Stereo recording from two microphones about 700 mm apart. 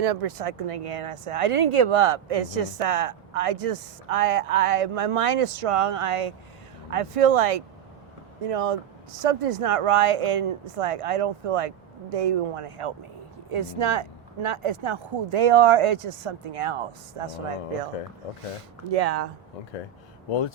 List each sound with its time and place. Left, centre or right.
0.0 s speech: right
18.9 s speech: right